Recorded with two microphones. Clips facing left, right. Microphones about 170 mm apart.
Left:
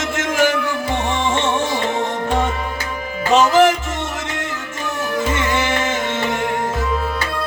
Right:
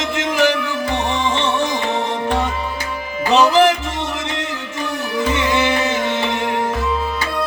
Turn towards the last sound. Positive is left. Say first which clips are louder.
# right 1 dB
turn(degrees=45)  # may be behind; listen again after turning